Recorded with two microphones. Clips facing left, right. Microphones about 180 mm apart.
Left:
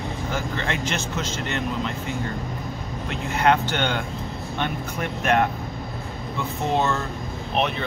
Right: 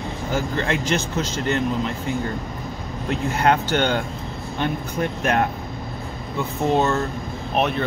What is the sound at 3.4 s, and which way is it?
A man's voice, 40° right (ahead or behind).